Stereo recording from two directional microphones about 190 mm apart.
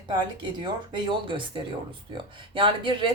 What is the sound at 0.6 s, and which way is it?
Speech, 25° right (ahead or behind).